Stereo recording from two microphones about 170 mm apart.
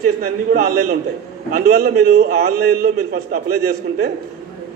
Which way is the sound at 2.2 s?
65° right (ahead or behind).